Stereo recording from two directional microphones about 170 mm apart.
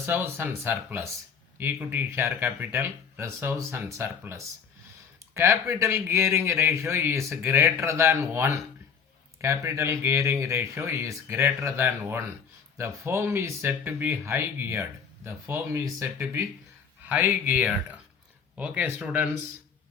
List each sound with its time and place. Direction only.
0.0 s speech: 15° right (ahead or behind)